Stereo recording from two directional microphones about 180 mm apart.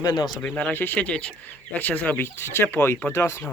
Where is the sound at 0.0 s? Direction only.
20° left (ahead or behind).